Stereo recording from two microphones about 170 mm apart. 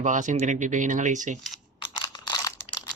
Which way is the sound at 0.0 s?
45° right (ahead or behind).